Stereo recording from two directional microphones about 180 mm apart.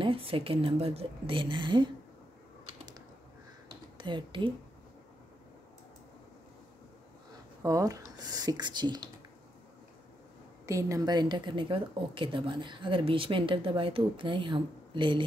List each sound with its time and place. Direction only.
0.0 s a woman's voice: 30° right (ahead or behind)
4.0 s speech: 25° right (ahead or behind)
7.6 s speech: 20° right (ahead or behind)
10.7 s speech: 15° right (ahead or behind)